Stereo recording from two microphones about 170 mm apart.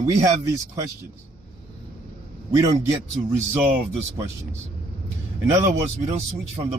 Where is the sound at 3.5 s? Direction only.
15° right (ahead or behind).